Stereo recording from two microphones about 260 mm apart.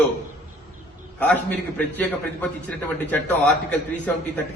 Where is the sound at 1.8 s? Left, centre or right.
Centre.